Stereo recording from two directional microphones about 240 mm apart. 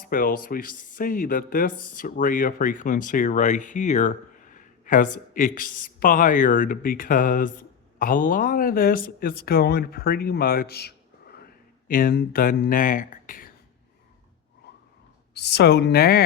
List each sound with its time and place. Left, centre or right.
0.0 s speech: left
15.4 s speech: left